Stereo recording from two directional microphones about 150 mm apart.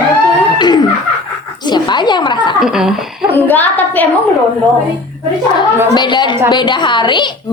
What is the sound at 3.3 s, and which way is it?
Speech, 10° left (ahead or behind).